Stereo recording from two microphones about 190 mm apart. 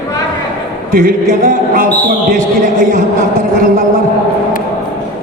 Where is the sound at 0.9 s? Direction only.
45° right (ahead or behind).